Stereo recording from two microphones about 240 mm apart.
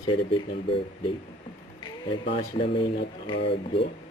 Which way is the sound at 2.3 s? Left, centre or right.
Left.